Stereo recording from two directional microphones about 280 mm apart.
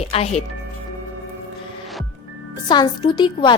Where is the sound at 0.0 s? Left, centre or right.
Left.